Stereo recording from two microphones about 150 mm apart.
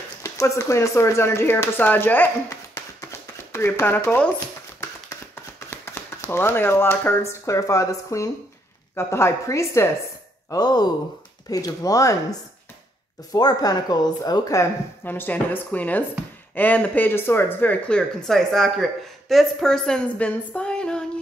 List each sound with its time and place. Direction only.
0.2 s speech: 20° left (ahead or behind)
5.3 s speech: 15° left (ahead or behind)